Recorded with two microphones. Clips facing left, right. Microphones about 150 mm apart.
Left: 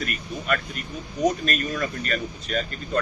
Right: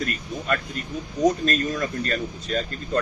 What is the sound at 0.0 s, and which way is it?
Speech, 30° right (ahead or behind).